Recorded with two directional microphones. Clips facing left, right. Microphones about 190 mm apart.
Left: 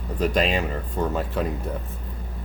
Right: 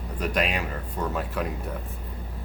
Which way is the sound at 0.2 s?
30° left (ahead or behind).